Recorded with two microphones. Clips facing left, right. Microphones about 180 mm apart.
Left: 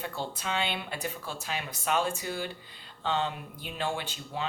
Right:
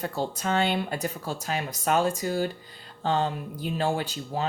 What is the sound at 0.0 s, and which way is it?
Speech, 40° right (ahead or behind).